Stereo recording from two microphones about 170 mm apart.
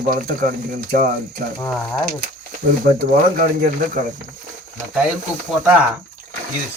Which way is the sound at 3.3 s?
55° right (ahead or behind).